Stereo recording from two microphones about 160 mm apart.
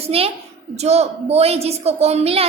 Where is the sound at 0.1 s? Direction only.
35° right (ahead or behind).